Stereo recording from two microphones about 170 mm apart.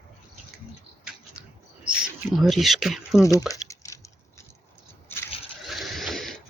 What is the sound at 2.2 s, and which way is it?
Speech, centre (ahead or behind).